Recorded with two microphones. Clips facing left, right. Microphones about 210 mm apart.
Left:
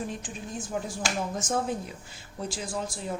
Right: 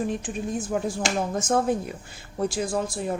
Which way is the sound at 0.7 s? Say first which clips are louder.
Right 4 dB; 60° right (ahead or behind).